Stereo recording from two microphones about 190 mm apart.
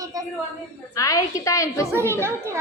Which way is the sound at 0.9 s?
15° left (ahead or behind).